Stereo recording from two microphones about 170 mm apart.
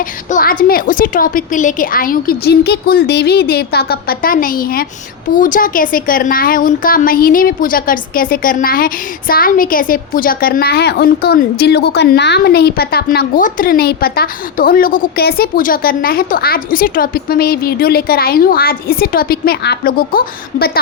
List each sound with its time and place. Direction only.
0.3 s a woman's voice: 55° left (ahead or behind)